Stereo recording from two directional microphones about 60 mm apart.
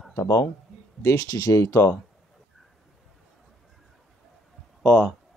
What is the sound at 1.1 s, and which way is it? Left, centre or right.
Speech, left.